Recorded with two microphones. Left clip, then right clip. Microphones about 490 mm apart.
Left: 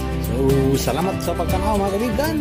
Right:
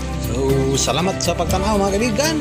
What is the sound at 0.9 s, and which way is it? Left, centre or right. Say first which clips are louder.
Speech: right 3 dB; left.